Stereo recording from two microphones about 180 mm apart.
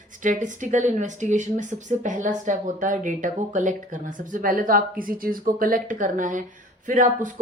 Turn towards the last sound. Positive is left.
turn(degrees=-45)  # may be behind; listen again after turning